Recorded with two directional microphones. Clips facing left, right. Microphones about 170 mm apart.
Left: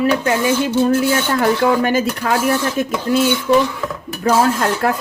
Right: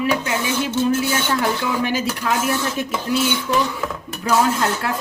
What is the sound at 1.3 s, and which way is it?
Speech, 50° left (ahead or behind).